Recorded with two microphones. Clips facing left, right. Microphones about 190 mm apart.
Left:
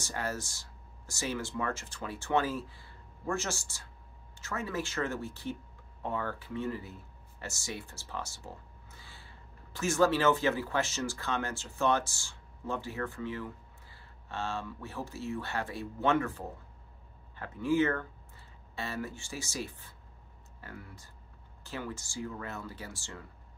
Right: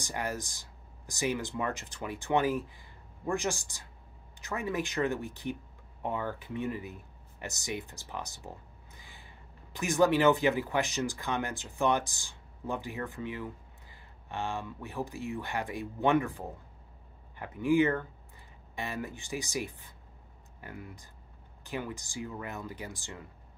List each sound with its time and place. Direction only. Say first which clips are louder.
0.0 s speech: right 1 dB; 15° right (ahead or behind)